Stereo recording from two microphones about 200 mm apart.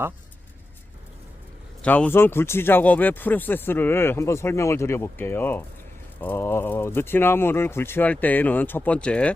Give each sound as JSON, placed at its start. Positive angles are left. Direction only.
{"t": 1.8, "sound": "speech", "side_deg": 5}